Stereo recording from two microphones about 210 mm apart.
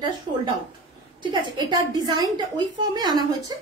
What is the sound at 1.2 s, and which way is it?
A woman's voice, 20° right (ahead or behind).